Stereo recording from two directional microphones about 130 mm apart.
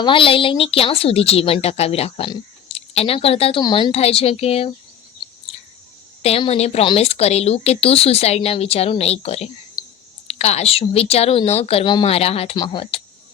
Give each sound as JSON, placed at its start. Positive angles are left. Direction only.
{"t": 0.0, "sound": "a woman's voice", "side_deg": 40}
{"t": 3.6, "sound": "a woman's voice", "side_deg": 35}
{"t": 3.9, "sound": "a woman's voice", "side_deg": 50}
{"t": 6.5, "sound": "a woman's voice", "side_deg": 50}